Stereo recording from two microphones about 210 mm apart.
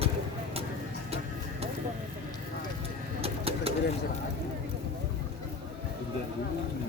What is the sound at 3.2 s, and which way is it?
Bird, 25° right (ahead or behind).